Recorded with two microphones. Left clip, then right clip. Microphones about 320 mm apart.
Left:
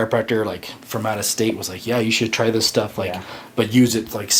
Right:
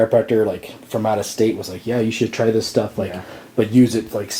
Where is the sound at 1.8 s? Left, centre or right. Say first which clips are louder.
Left 1 dB; left.